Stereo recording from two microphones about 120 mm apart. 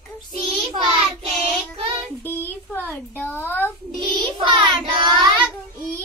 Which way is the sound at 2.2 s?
15° left (ahead or behind).